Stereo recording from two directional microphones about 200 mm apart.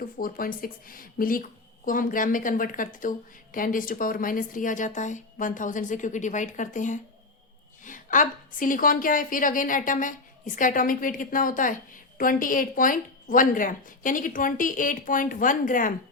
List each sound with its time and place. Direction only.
0.0 s a woman's voice: 45° left (ahead or behind)